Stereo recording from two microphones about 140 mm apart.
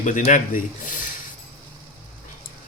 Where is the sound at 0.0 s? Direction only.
60° left (ahead or behind).